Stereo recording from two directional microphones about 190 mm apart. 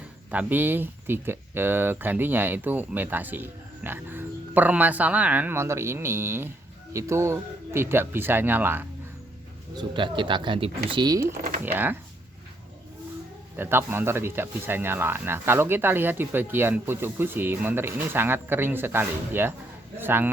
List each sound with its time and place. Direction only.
0.3 s speech: 10° right (ahead or behind)
9.7 s speech: 25° right (ahead or behind)
13.6 s speech: 10° right (ahead or behind)